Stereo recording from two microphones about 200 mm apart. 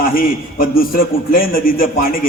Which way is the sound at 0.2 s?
45° left (ahead or behind).